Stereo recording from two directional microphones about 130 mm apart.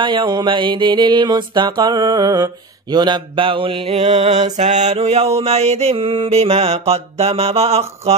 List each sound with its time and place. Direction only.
0.0 s music: 40° right (ahead or behind); by 8.2 s 55° right (ahead or behind)